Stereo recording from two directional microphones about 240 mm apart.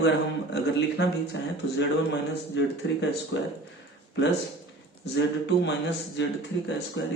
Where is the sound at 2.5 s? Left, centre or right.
Left.